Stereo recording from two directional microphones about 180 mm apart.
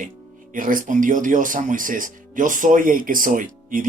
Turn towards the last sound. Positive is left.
turn(degrees=-50)  # may be behind; listen again after turning